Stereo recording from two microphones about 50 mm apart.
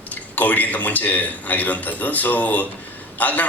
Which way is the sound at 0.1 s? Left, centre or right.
Left.